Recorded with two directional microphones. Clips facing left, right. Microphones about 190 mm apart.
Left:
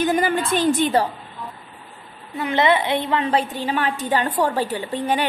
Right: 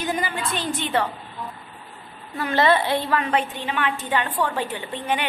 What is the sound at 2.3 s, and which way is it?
A woman's voice, 20° left (ahead or behind).